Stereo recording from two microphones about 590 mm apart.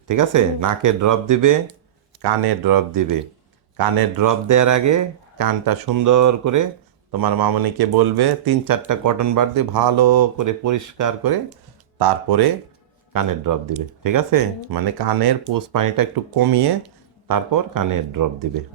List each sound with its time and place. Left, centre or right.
0.1 s speech: right